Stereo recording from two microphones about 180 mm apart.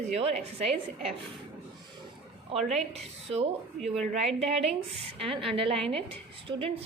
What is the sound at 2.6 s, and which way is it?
Speech, 40° right (ahead or behind).